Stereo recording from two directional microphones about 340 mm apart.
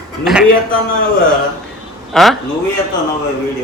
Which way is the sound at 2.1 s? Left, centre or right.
Centre.